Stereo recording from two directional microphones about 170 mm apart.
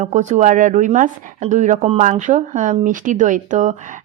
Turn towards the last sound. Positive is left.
turn(degrees=-50)  # may be behind; listen again after turning